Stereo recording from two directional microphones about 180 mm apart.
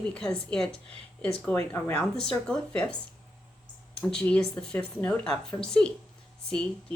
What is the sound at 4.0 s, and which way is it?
A woman's voice, 5° left (ahead or behind).